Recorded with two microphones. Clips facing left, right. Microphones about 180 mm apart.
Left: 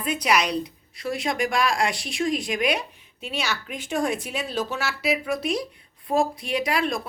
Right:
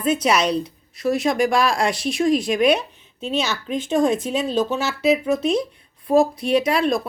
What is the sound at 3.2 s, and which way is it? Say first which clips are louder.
Speech: right 6 dB; 25° right (ahead or behind).